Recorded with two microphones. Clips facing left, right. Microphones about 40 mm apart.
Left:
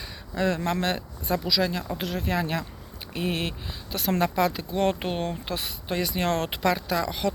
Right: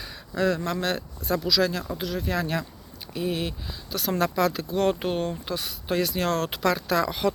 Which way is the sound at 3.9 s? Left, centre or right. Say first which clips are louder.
Even; left.